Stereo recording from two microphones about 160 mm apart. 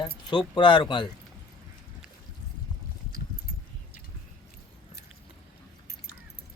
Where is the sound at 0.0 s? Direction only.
30° left (ahead or behind).